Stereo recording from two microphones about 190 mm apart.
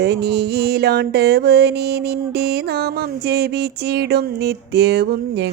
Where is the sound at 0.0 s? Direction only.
60° right (ahead or behind).